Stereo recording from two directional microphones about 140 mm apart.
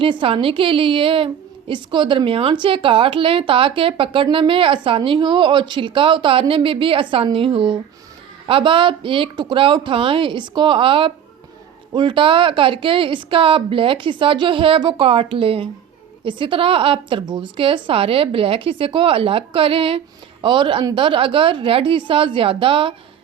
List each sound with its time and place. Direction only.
0.0 s a woman's voice: 40° right (ahead or behind)